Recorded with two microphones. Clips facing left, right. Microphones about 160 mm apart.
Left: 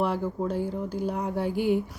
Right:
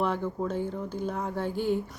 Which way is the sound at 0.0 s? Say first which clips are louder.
Left 2 dB; 10° left (ahead or behind).